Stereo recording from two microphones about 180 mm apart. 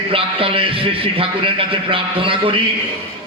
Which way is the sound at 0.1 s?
30° right (ahead or behind).